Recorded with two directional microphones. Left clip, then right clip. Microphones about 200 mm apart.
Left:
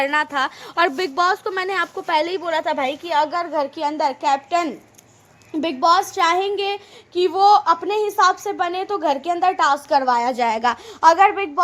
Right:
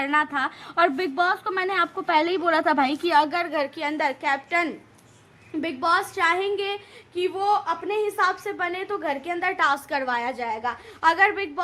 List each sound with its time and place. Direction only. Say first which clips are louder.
0.0 s a woman's voice: left 3 dB; 50° left (ahead or behind)
2.5 s a woman's voice: right 2 dB; 25° left (ahead or behind)
3.2 s a woman's voice: left 2 dB; 5° left (ahead or behind); by 10.3 s 20° left (ahead or behind)
10.3 s a woman's voice: left 9 dB; 50° left (ahead or behind)
11.2 s a woman's voice: left 6 dB; centre (ahead or behind)